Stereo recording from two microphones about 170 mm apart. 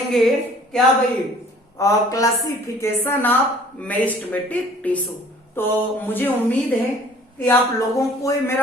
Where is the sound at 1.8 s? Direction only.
20° left (ahead or behind).